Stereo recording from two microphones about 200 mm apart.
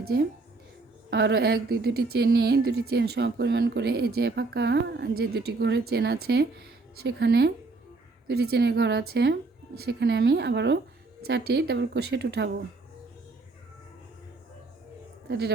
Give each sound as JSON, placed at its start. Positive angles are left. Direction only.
{"t": 0.0, "sound": "a woman's voice", "side_deg": -50}
{"t": 15.3, "sound": "a woman's voice", "side_deg": -55}